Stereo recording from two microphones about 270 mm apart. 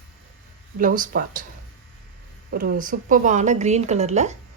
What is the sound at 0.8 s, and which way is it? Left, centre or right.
Speech, right.